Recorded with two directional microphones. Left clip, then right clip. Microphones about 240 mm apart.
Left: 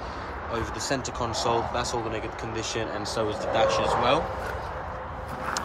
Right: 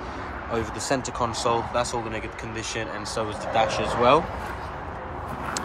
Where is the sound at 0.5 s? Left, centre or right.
Centre.